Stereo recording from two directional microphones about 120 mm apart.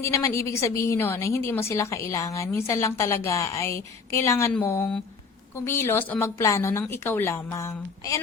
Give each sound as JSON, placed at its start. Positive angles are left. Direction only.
{"t": 0.0, "sound": "a woman's voice", "side_deg": 25}